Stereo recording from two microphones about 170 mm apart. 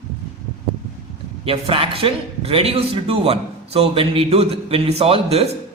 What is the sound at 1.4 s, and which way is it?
A man's voice, 35° right (ahead or behind).